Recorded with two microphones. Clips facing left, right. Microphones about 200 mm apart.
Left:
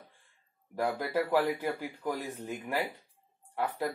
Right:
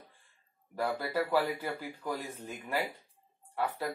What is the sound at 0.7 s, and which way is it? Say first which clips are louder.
Speech: left 2 dB; 15° left (ahead or behind).